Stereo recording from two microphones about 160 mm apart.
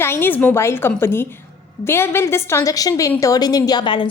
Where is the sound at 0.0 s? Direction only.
15° left (ahead or behind).